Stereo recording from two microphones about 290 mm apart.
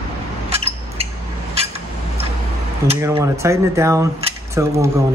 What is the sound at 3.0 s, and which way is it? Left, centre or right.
Speech, centre.